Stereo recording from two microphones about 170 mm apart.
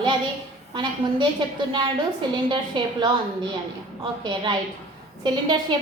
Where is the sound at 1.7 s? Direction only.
25° right (ahead or behind).